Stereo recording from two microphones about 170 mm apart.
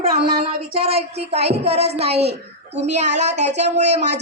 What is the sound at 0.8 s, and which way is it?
A woman's voice, 35° right (ahead or behind).